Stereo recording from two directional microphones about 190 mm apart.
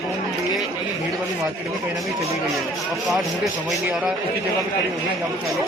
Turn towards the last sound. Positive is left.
turn(degrees=-5)  # may be behind; listen again after turning